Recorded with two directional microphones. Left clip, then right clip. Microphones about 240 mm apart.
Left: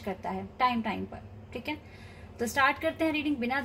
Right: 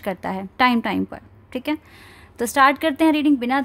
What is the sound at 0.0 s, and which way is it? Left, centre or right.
A woman's voice, right.